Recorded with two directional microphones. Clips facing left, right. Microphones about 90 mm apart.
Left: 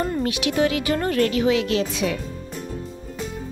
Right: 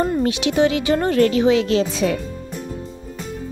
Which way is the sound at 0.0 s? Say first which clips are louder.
Right 4 dB; 25° right (ahead or behind).